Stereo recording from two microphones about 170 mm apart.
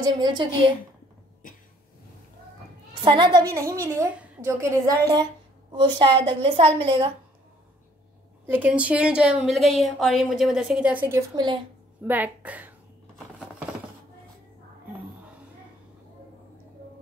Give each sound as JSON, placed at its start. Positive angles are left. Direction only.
{"t": 0.0, "sound": "a woman's voice", "side_deg": -25}
{"t": 3.0, "sound": "a woman's voice", "side_deg": -30}
{"t": 3.4, "sound": "a woman's voice", "side_deg": -15}
{"t": 8.5, "sound": "a woman's voice", "side_deg": -10}